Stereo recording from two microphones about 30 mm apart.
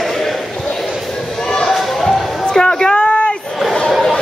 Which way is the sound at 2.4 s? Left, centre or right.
Left.